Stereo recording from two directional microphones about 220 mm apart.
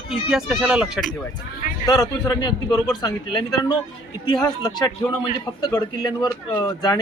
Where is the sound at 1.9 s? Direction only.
15° left (ahead or behind).